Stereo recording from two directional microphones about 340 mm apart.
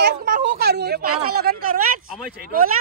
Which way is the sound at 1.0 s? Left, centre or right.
Right.